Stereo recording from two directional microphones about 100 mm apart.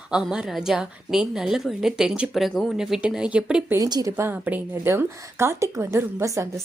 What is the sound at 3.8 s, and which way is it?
Speech, 40° right (ahead or behind).